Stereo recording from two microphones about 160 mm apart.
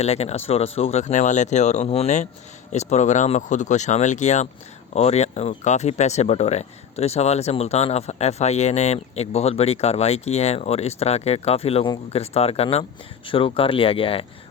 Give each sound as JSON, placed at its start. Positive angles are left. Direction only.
{"t": 0.0, "sound": "speech", "side_deg": 40}